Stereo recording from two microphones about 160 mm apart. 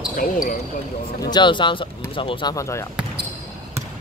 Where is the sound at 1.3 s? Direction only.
30° left (ahead or behind).